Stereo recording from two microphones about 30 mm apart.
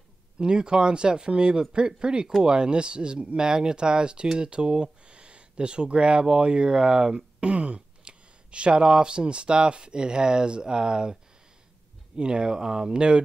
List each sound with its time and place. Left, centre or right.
0.4 s speech: right
7.4 s speech: right
12.2 s speech: right